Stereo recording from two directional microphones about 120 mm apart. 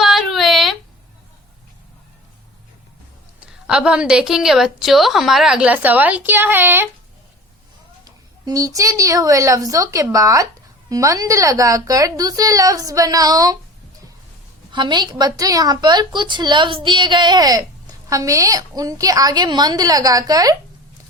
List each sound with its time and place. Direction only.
0.0 s a sound: 5° right (ahead or behind)
3.4 s a woman's voice: 10° right (ahead or behind)
8.4 s speech: 30° right (ahead or behind)
14.7 s a woman's voice: 40° right (ahead or behind)